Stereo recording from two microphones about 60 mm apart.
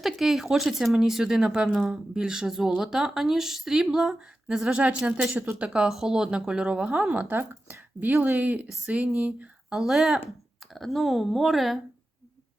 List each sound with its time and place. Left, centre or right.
0.0 s speech: centre
4.8 s speech: right
9.8 s speech: centre